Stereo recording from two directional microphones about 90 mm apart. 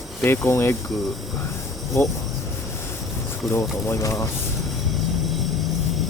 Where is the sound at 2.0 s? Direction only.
25° left (ahead or behind).